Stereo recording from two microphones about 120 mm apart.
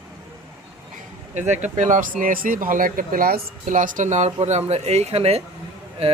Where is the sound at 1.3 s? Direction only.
80° right.